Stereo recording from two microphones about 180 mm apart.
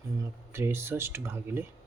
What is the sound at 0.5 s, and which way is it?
Speech, 15° right (ahead or behind).